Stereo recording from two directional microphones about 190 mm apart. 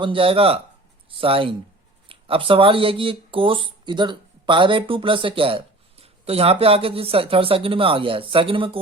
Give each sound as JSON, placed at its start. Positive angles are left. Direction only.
{"t": 0.0, "sound": "speech", "side_deg": -30}